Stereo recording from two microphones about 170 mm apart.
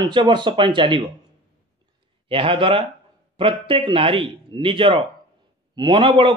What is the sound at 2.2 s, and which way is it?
A man's voice, 30° right (ahead or behind).